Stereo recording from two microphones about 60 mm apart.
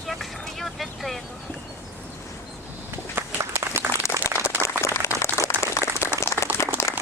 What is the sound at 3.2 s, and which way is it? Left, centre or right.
Run, right.